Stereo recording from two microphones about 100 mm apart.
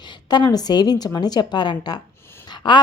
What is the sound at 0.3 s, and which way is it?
A woman's voice, 45° left (ahead or behind).